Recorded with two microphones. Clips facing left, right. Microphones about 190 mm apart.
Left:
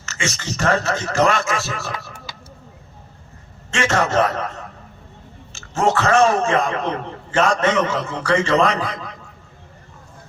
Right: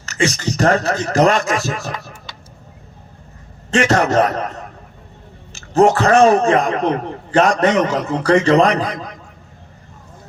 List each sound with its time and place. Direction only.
0.2 s a man's voice: 35° right (ahead or behind)
3.7 s a man's voice: 35° right (ahead or behind)
5.7 s a man's voice: 35° right (ahead or behind)